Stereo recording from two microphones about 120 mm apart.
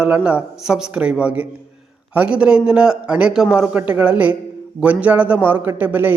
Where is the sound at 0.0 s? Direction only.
10° right (ahead or behind).